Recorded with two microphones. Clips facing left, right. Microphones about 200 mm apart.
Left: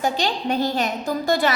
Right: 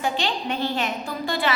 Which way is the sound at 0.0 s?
40° left (ahead or behind).